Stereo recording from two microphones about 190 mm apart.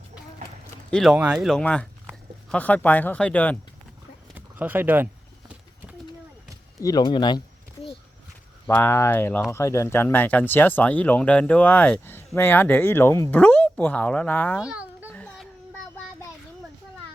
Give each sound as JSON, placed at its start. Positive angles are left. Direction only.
{"t": 0.9, "sound": "speech", "side_deg": 5}
{"t": 4.4, "sound": "speech", "side_deg": -10}
{"t": 6.7, "sound": "a sound", "side_deg": 20}
{"t": 8.6, "sound": "speech", "side_deg": 10}
{"t": 14.6, "sound": "babbling", "side_deg": -5}
{"t": 15.1, "sound": "child singing", "side_deg": 5}